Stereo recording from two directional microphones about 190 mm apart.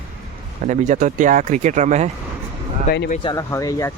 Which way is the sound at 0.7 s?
40° right (ahead or behind).